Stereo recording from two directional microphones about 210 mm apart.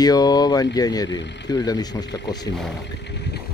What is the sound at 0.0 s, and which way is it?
Speech, 20° left (ahead or behind).